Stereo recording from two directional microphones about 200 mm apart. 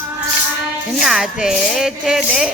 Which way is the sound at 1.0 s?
5° right (ahead or behind).